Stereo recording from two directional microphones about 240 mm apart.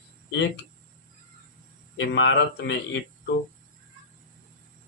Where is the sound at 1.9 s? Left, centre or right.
Left.